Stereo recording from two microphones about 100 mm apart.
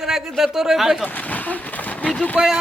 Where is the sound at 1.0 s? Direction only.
15° left (ahead or behind).